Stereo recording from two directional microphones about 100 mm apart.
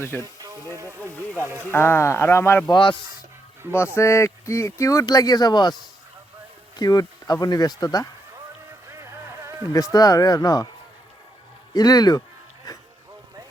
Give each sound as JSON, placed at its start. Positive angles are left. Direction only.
{"t": 0.0, "sound": "speech", "side_deg": 25}
{"t": 0.8, "sound": "speech", "side_deg": -25}
{"t": 1.7, "sound": "speech", "side_deg": 25}
{"t": 2.6, "sound": "speech", "side_deg": 55}
{"t": 3.9, "sound": "speech", "side_deg": 25}
{"t": 6.7, "sound": "speech", "side_deg": 40}
{"t": 8.9, "sound": "a sound", "side_deg": -30}
{"t": 9.7, "sound": "speech", "side_deg": 35}
{"t": 11.7, "sound": "speech", "side_deg": 40}
{"t": 12.7, "sound": "music", "side_deg": 35}